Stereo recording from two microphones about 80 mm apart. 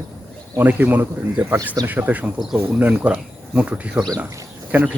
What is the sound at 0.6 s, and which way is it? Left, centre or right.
A man's voice, right.